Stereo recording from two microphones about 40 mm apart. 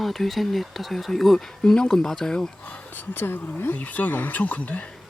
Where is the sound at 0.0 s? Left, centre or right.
Centre.